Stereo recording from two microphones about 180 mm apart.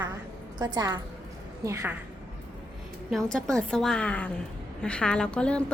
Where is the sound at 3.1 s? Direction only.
Centre (ahead or behind).